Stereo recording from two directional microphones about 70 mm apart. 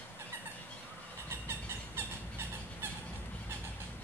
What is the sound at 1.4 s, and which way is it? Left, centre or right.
Vehicle, right.